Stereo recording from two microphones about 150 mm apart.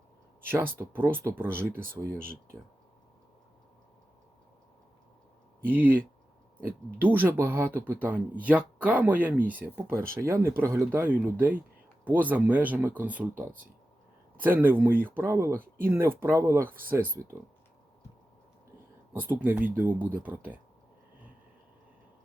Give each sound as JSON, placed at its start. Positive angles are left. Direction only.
{"t": 0.4, "sound": "speech", "side_deg": -15}
{"t": 5.6, "sound": "speech", "side_deg": -10}
{"t": 19.3, "sound": "speech", "side_deg": -10}